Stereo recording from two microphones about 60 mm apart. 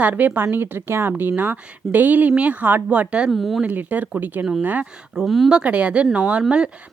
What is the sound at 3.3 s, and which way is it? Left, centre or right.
Speech, centre.